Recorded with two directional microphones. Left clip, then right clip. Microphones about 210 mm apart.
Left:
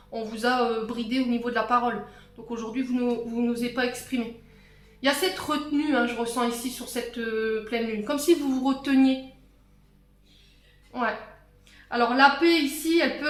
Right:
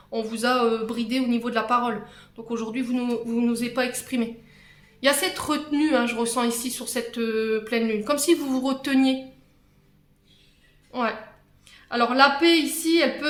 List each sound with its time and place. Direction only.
0.1 s speech: 35° right (ahead or behind)
10.9 s speech: 35° right (ahead or behind)